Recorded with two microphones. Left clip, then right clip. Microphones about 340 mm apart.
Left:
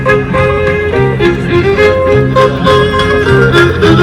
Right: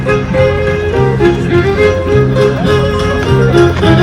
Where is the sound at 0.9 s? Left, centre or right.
Left.